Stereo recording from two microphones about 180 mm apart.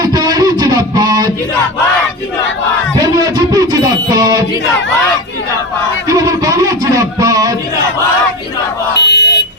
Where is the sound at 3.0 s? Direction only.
20° right (ahead or behind).